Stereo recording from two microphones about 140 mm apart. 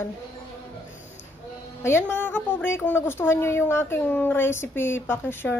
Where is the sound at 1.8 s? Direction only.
20° left (ahead or behind).